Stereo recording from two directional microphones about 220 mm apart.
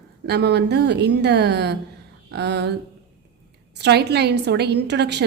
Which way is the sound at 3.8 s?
50° right (ahead or behind).